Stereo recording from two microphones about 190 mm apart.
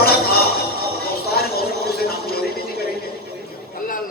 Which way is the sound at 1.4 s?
55° left (ahead or behind).